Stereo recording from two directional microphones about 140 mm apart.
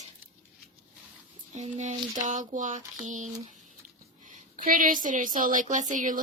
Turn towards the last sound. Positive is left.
turn(degrees=-65)  # may be behind; listen again after turning